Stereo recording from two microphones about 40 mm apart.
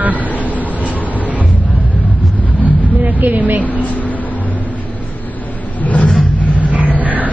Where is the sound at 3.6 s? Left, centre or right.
Left.